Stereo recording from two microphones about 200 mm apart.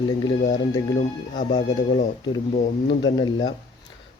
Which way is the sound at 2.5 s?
35° left (ahead or behind).